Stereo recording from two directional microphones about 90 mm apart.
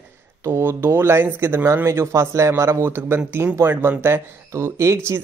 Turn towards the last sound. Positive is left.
turn(degrees=-35)  # may be behind; listen again after turning